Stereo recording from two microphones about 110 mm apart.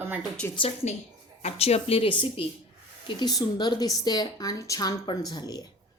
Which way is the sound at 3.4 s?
40° left (ahead or behind).